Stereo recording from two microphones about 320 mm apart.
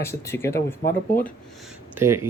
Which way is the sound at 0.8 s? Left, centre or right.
Left.